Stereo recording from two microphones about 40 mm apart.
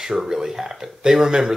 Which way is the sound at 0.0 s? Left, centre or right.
Centre.